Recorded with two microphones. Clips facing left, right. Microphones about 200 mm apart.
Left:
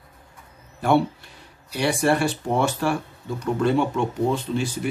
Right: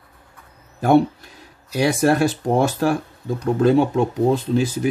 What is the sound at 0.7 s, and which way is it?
Speech, 40° right (ahead or behind).